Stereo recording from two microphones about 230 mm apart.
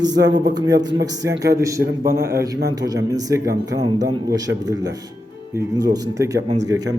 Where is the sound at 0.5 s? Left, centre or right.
Centre.